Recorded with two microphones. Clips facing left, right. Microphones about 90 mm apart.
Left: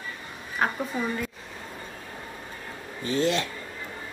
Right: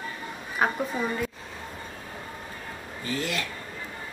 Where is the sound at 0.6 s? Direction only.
5° right (ahead or behind).